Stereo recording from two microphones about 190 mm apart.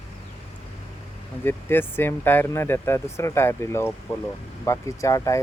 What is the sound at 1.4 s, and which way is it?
Speech, 10° left (ahead or behind).